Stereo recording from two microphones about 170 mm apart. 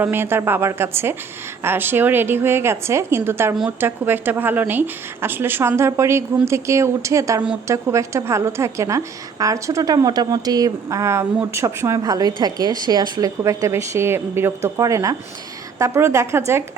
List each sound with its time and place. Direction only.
0.0 s a woman's voice: 10° right (ahead or behind)